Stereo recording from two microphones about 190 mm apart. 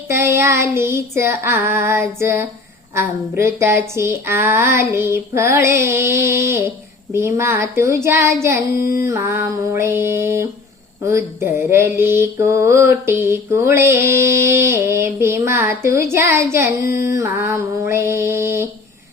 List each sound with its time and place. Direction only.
0.1 s mantra: 15° right (ahead or behind)
16.9 s a sound: 50° left (ahead or behind)
17.2 s mantra: 10° right (ahead or behind)